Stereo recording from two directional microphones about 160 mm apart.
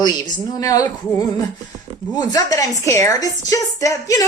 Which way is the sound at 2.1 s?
25° left (ahead or behind).